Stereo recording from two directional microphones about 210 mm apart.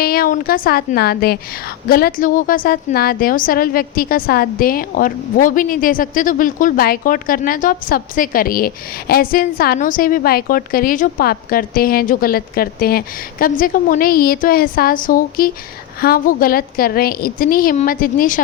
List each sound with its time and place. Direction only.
0.0 s a woman's voice: 45° left (ahead or behind)